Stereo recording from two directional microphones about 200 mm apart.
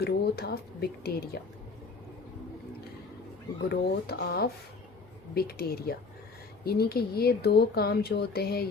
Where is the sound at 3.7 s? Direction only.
55° left (ahead or behind).